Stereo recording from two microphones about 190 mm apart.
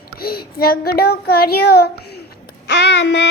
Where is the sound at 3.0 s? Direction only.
65° left (ahead or behind).